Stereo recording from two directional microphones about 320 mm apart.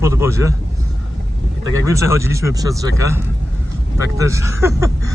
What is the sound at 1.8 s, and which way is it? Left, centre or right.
Speech, centre.